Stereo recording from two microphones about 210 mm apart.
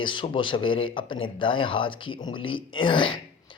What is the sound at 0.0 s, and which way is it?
Speech, 25° left (ahead or behind).